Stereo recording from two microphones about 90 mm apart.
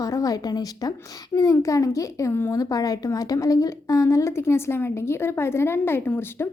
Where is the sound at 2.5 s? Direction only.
40° left (ahead or behind).